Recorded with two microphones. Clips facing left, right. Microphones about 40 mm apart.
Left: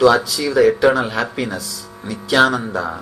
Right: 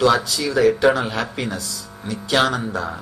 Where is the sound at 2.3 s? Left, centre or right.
Left.